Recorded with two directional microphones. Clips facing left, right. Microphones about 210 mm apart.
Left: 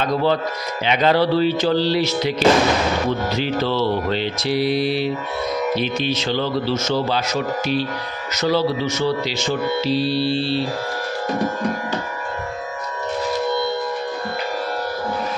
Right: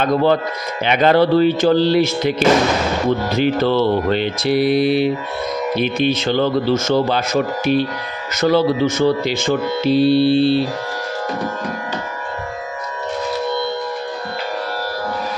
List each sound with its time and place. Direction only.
0.0 s speech: 55° right (ahead or behind)
3.3 s mantra: 55° right (ahead or behind)
5.8 s speech: 55° right (ahead or behind)